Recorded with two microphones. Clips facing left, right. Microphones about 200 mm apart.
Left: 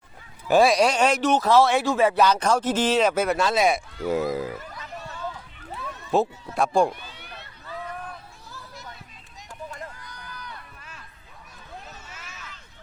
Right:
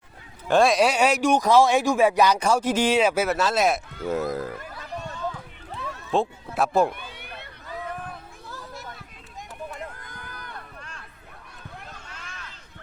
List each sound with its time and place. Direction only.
0.4 s speech: 5° left (ahead or behind)
6.1 s speech: centre (ahead or behind)
6.9 s cat: 55° right (ahead or behind)
9.9 s run: 55° right (ahead or behind)
10.8 s a sound: 5° left (ahead or behind)
12.0 s a sound: 5° left (ahead or behind)